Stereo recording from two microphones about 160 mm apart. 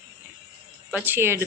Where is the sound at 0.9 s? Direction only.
10° right (ahead or behind).